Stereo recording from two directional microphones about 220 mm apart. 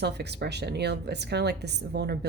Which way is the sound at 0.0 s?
50° right (ahead or behind).